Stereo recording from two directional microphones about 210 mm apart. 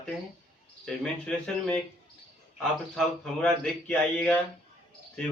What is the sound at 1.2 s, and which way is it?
Speech, 5° left (ahead or behind).